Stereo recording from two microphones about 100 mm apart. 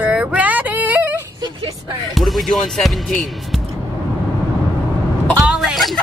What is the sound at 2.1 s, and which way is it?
Speech, centre (ahead or behind).